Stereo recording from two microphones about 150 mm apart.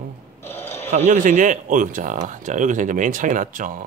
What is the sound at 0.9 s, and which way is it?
Speech, 55° right (ahead or behind).